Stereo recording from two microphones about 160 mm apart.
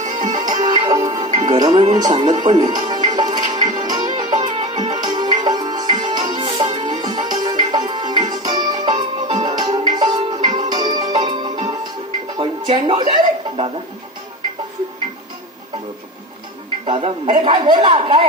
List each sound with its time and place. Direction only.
0.0 s music: 55° right (ahead or behind)
0.6 s music: 25° right (ahead or behind)
8.2 s music: 55° right (ahead or behind)
8.4 s music: 25° right (ahead or behind)
16.8 s speech: 35° right (ahead or behind)